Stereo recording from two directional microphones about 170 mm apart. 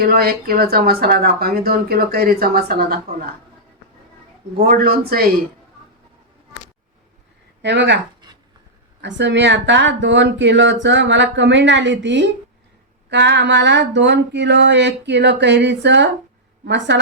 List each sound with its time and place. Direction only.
0.0 s speech: 60° right (ahead or behind)
4.6 s speech: 65° right (ahead or behind)
7.6 s speech: 90° right
9.0 s speech: 90° right